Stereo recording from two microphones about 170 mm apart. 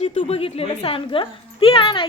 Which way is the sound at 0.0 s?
40° left (ahead or behind).